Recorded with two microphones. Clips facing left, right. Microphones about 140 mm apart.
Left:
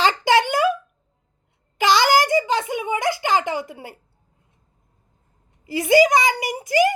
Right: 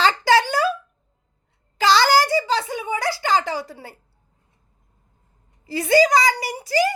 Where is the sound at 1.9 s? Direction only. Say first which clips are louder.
Even; 15° left (ahead or behind).